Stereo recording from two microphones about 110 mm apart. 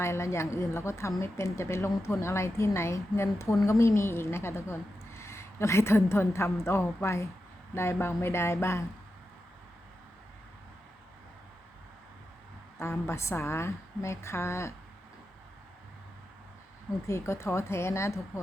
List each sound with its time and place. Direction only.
0.0 s a woman's voice: 25° left (ahead or behind)
12.8 s speech: 20° left (ahead or behind)
17.1 s speech: 25° left (ahead or behind)